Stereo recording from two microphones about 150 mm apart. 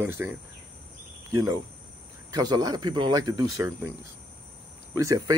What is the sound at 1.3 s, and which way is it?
Speech, 25° right (ahead or behind).